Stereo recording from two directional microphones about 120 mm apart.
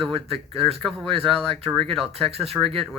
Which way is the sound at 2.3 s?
55° right (ahead or behind).